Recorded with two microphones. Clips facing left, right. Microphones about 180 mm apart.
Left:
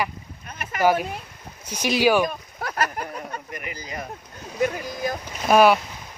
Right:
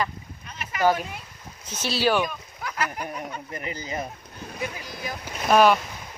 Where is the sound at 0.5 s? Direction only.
50° left (ahead or behind).